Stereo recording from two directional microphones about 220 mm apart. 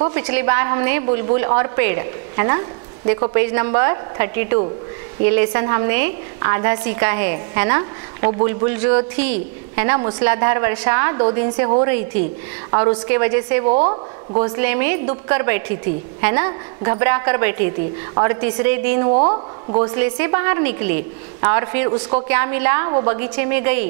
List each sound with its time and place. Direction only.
0.1 s a woman's voice: 15° right (ahead or behind)
13.7 s a woman's voice: 30° right (ahead or behind)
14.6 s a woman's voice: 15° right (ahead or behind)
19.1 s a woman's voice: 30° right (ahead or behind)